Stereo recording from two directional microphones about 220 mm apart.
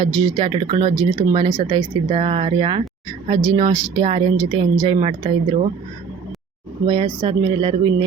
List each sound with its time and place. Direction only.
0.0 s speech: 20° right (ahead or behind)
6.8 s speech: 20° right (ahead or behind)